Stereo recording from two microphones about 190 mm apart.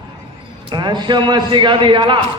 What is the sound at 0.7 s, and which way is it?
A man's voice, 25° right (ahead or behind).